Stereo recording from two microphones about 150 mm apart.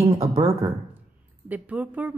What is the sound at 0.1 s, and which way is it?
Speech, 40° right (ahead or behind).